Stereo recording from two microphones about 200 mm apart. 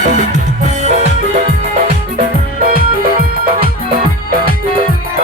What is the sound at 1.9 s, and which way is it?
Music, 45° right (ahead or behind).